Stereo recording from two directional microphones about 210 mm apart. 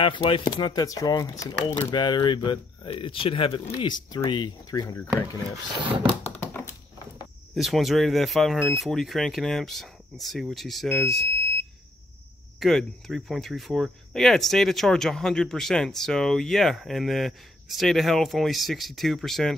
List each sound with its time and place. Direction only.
0.0 s speech: 25° left (ahead or behind)
6.0 s a sound: 10° left (ahead or behind)
7.5 s speech: centre (ahead or behind)
12.5 s speech: centre (ahead or behind)